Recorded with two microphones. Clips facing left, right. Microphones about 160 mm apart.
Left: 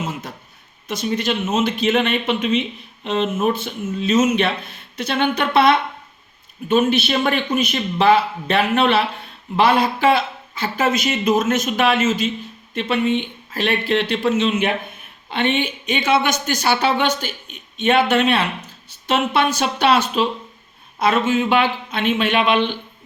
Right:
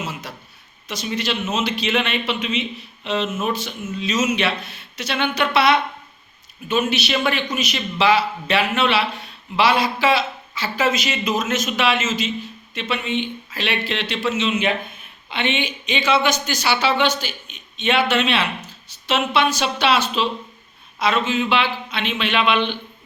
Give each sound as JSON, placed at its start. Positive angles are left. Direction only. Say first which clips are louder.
{"t": 0.0, "sound": "a sound", "louder": "left 3 dB", "side_deg": 50}
{"t": 0.9, "sound": "speech", "louder": "left 4 dB", "side_deg": 50}
{"t": 6.9, "sound": "speech", "louder": "left 3 dB", "side_deg": 50}
{"t": 17.8, "sound": "speech", "louder": "left 3 dB", "side_deg": 50}